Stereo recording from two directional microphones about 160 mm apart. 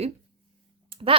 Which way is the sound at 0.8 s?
35° right (ahead or behind).